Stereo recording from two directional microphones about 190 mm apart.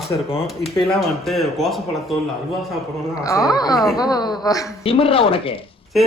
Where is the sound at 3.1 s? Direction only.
20° left (ahead or behind).